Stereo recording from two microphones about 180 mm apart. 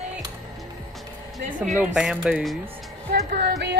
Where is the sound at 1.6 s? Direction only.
5° right (ahead or behind).